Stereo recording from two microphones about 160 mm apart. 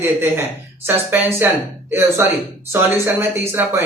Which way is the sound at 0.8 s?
15° right (ahead or behind).